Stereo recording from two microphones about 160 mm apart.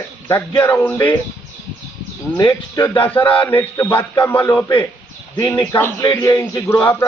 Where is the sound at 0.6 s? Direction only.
10° left (ahead or behind).